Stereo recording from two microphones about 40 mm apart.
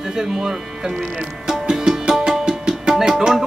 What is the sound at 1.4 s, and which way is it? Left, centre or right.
Music, centre.